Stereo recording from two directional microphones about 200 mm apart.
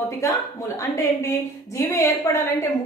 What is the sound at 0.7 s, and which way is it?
A woman's voice, 15° left (ahead or behind).